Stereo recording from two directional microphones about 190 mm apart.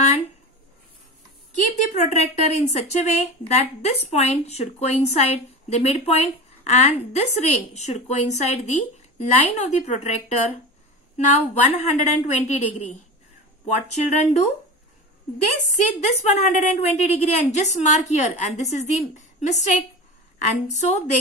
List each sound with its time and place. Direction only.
2.0 s a woman's voice: 35° left (ahead or behind)
16.3 s a woman's voice: 35° left (ahead or behind)